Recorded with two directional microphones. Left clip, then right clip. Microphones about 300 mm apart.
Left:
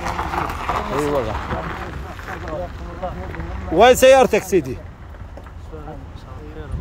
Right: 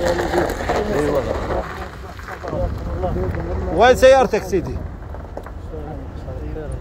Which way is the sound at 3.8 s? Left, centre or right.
Left.